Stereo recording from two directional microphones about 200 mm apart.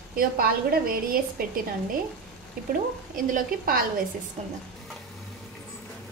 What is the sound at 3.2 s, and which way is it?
Speech, 45° right (ahead or behind).